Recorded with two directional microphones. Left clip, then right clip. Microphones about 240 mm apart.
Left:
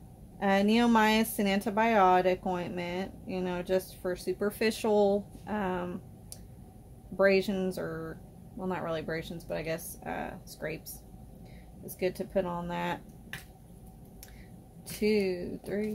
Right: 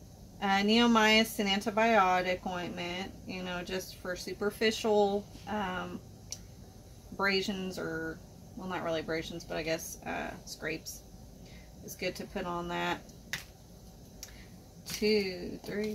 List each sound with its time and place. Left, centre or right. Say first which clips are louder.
0.4 s speech: left 1 dB; left
7.2 s speech: left 5 dB; left
12.0 s speech: left 6 dB; left
15.0 s speech: left 1 dB; left